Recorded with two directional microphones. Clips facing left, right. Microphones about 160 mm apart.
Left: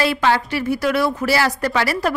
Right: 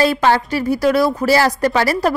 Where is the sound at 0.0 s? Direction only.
40° right (ahead or behind).